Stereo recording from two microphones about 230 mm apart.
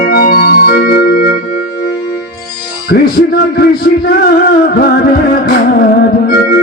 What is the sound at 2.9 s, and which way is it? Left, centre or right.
A man's voice, left.